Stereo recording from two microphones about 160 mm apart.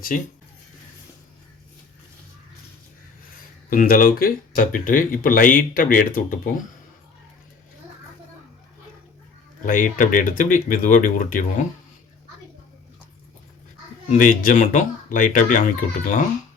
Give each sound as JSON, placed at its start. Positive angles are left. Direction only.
{"t": 3.7, "sound": "speech", "side_deg": 60}
{"t": 9.6, "sound": "speech", "side_deg": 55}
{"t": 14.1, "sound": "speech", "side_deg": 55}